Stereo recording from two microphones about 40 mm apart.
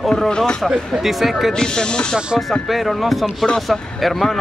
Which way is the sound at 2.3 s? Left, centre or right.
Centre.